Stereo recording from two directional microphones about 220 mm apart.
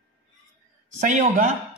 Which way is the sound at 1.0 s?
35° right (ahead or behind).